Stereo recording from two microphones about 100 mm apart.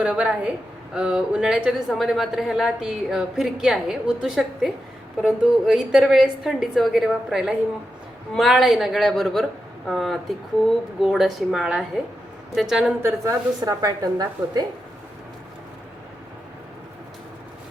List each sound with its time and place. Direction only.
0.0 s a woman's voice: 10° right (ahead or behind)
13.0 s a woman's voice: 25° right (ahead or behind)